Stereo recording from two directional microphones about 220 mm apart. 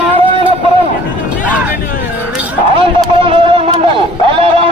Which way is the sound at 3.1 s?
25° right (ahead or behind).